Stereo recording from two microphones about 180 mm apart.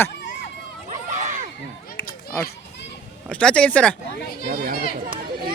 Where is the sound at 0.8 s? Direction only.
40° right (ahead or behind).